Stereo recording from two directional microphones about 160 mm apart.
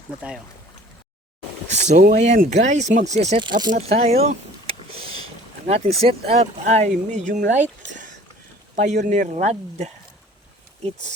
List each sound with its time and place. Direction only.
1.7 s speech: 45° right (ahead or behind)